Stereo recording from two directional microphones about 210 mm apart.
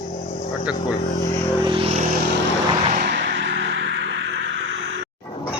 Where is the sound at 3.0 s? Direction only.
55° right (ahead or behind).